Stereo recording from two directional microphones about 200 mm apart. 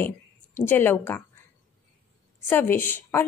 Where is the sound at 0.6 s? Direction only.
10° left (ahead or behind).